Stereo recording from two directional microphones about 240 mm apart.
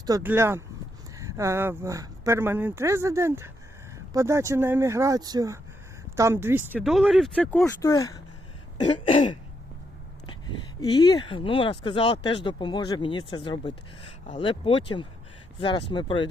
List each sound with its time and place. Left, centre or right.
0.0 s speech: centre